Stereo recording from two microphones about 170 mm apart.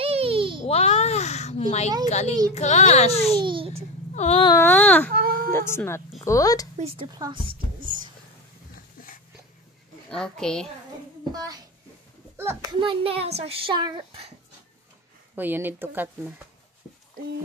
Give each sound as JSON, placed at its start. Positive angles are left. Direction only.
{"t": 0.0, "sound": "a sound", "side_deg": -35}
{"t": 0.7, "sound": "a sound", "side_deg": 35}
{"t": 2.0, "sound": "a child's voice", "side_deg": 40}
{"t": 3.3, "sound": "a child's voice", "side_deg": -30}
{"t": 4.1, "sound": "whimper", "side_deg": 40}
{"t": 4.6, "sound": "speech", "side_deg": 10}
{"t": 5.1, "sound": "baby cry", "side_deg": -60}
{"t": 5.5, "sound": "a woman's voice", "side_deg": 15}
{"t": 6.8, "sound": "a child's voice", "side_deg": -30}
{"t": 7.2, "sound": "a sound", "side_deg": -30}
{"t": 10.0, "sound": "a child's voice", "side_deg": 5}
{"t": 11.3, "sound": "a child's voice", "side_deg": -20}
{"t": 12.7, "sound": "a child's voice", "side_deg": -30}
{"t": 15.3, "sound": "speech", "side_deg": -10}